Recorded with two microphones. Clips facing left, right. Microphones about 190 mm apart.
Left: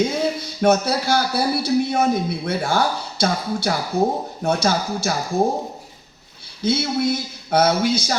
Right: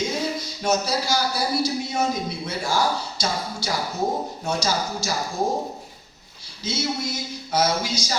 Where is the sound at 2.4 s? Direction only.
60° left (ahead or behind).